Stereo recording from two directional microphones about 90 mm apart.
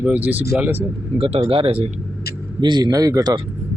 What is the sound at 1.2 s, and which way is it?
Speech, 90° right.